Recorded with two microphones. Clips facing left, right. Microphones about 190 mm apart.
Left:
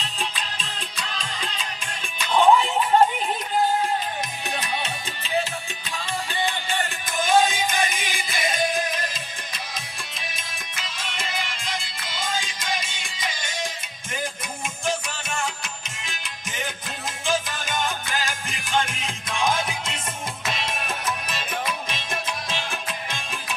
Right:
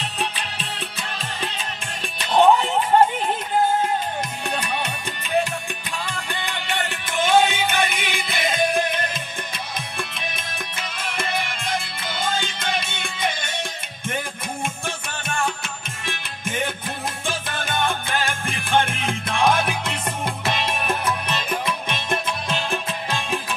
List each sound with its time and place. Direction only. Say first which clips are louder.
0.0 s music: right 3 dB; 60° right (ahead or behind)
2.2 s music: right 2 dB; 40° right (ahead or behind)
6.2 s music: left 2 dB; 65° right (ahead or behind)
10.1 s music: right 6 dB; 60° right (ahead or behind)
14.9 s music: left 2 dB; 55° right (ahead or behind)